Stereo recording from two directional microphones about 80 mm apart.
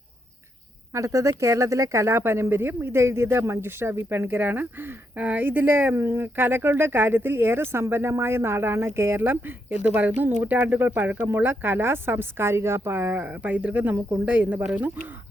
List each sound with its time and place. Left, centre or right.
0.9 s speech: right; by 14.7 s centre